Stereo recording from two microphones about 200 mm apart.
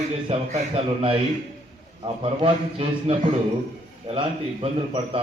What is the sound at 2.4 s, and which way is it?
Speech, 30° right (ahead or behind).